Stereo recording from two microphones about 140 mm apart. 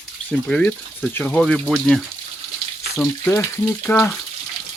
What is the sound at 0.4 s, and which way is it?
Speech, 5° left (ahead or behind).